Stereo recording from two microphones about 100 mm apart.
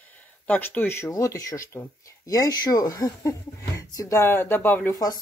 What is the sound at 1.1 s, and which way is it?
Speech, 35° left (ahead or behind).